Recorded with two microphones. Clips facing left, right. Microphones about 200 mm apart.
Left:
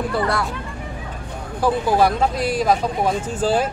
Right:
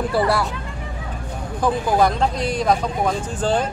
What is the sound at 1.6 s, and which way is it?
Speech, 5° left (ahead or behind).